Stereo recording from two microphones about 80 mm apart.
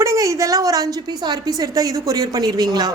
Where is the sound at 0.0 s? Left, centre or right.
Right.